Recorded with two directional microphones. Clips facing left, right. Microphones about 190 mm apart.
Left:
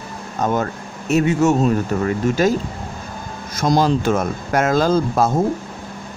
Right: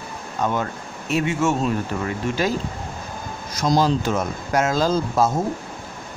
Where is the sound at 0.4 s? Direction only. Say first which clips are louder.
Left 4 dB; 45° left (ahead or behind).